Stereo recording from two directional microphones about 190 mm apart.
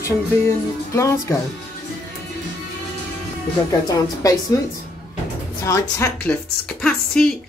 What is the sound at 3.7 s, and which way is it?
Speech, 20° left (ahead or behind).